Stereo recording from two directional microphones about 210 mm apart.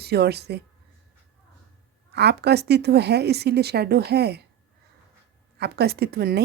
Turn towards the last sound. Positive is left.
turn(degrees=-50)  # may be behind; listen again after turning